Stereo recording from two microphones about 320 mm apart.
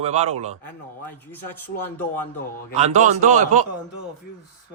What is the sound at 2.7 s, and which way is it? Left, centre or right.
Speech, right.